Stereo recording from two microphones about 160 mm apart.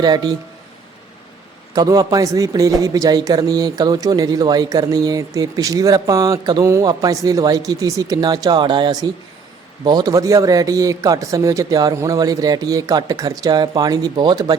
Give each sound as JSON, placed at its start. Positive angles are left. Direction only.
{"t": 0.0, "sound": "a man's voice", "side_deg": -25}
{"t": 1.7, "sound": "a man's voice", "side_deg": -25}